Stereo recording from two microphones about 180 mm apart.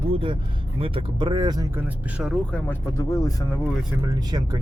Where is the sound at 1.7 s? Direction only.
10° right (ahead or behind).